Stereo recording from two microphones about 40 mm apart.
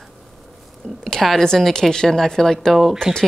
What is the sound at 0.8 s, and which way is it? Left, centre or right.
Speech, left.